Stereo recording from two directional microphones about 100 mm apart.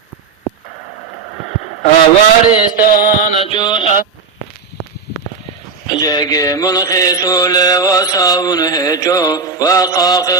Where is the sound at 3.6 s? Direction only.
45° left (ahead or behind).